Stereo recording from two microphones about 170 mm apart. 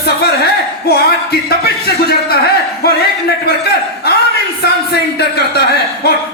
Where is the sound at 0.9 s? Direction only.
65° left (ahead or behind).